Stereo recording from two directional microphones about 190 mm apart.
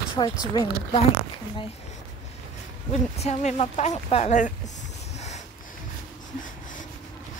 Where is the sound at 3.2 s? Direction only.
35° left (ahead or behind).